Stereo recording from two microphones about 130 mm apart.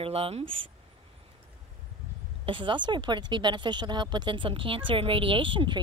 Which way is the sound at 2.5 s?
40° right (ahead or behind).